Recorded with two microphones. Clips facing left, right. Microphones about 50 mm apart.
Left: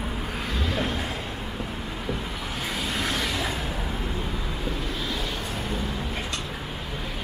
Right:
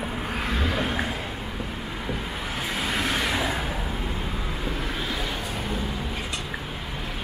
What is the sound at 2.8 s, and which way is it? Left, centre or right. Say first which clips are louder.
Vehicle: right 2 dB; centre.